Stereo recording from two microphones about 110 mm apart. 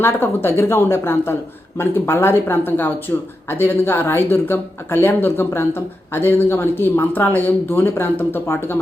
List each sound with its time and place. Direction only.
0.0 s speech: 20° left (ahead or behind)